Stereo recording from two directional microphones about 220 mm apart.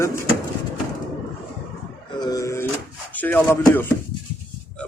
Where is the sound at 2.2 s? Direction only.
15° left (ahead or behind).